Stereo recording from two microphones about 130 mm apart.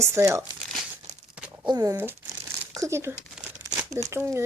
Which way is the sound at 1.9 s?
15° right (ahead or behind).